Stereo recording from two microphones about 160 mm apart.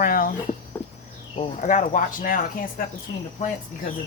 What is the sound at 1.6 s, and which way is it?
Speech, 50° left (ahead or behind).